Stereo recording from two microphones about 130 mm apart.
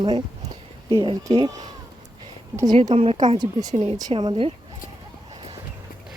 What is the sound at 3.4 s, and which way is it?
A woman's voice, 30° right (ahead or behind).